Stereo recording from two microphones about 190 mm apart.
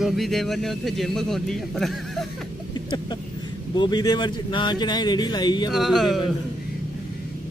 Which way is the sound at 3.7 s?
20° left (ahead or behind).